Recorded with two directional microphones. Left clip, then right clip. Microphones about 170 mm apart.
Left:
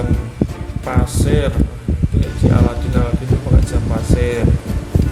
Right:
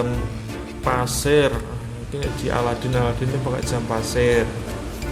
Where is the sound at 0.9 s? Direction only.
25° right (ahead or behind).